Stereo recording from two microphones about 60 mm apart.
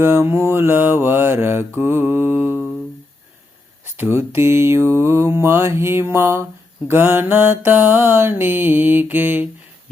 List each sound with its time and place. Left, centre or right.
0.0 s mantra: right
3.8 s mantra: right